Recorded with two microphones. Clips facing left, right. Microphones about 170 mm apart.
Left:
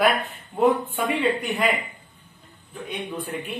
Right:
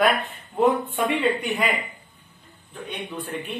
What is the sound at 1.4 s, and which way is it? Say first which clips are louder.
Speech: left 1 dB; centre (ahead or behind).